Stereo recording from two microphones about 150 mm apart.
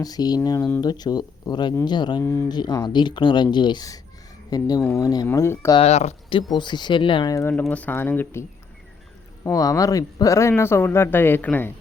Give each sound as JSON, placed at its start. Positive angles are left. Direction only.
{"t": 0.0, "sound": "speech", "side_deg": 25}
{"t": 4.8, "sound": "speech", "side_deg": 10}
{"t": 5.0, "sound": "speech", "side_deg": 20}
{"t": 5.7, "sound": "speech", "side_deg": 45}
{"t": 6.6, "sound": "speech", "side_deg": 30}
{"t": 7.5, "sound": "speech", "side_deg": 10}